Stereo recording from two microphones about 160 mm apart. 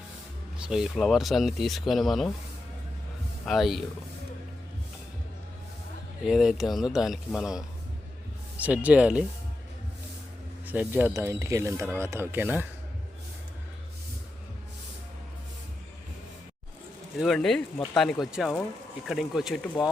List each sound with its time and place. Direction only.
0.6 s speech: 5° right (ahead or behind)
3.4 s speech: centre (ahead or behind)
6.2 s speech: centre (ahead or behind)
10.7 s speech: 10° right (ahead or behind)
17.2 s speech: centre (ahead or behind)